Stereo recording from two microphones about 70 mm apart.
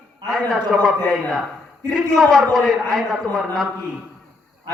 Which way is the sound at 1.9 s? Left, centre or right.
Centre.